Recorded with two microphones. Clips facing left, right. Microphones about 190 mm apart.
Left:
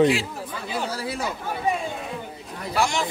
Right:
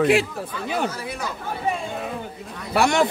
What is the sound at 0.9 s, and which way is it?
Speech, 30° left (ahead or behind).